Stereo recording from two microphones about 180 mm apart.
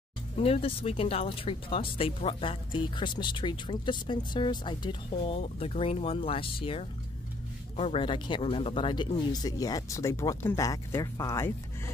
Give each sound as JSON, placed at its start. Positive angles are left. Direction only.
{"t": 0.4, "sound": "speech", "side_deg": 30}